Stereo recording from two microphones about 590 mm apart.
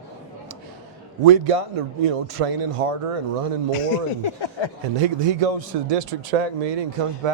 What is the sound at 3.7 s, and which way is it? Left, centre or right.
Speech, left.